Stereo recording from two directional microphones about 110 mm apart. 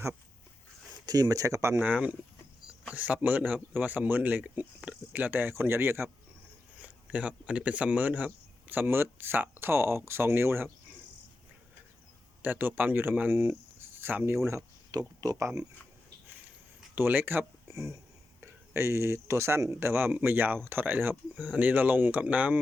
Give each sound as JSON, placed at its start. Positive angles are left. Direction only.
{"t": 1.0, "sound": "speech", "side_deg": -35}
{"t": 1.9, "sound": "speech", "side_deg": -10}
{"t": 12.4, "sound": "speech", "side_deg": -15}
{"t": 14.4, "sound": "speech", "side_deg": -30}
{"t": 16.9, "sound": "speech", "side_deg": -15}